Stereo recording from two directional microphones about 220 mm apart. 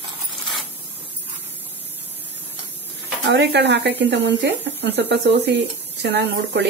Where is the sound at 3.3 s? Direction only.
50° right (ahead or behind).